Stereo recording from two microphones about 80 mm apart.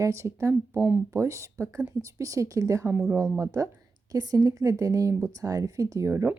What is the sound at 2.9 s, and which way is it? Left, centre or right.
Speech, right.